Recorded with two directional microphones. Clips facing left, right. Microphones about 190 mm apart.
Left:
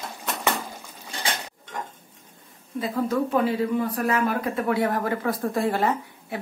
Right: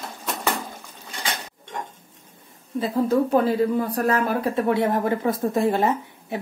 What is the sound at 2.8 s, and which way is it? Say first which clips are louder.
Speech: right 4 dB; 35° right (ahead or behind).